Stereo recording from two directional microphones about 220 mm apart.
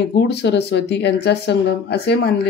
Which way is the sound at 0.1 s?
50° left (ahead or behind).